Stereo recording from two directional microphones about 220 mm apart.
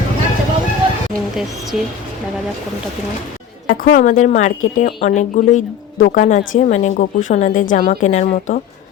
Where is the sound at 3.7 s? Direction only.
40° left (ahead or behind).